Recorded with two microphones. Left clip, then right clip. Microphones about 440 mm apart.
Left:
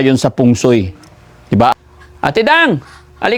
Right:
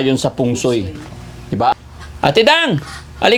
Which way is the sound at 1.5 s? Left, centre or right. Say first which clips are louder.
Left 4 dB; left.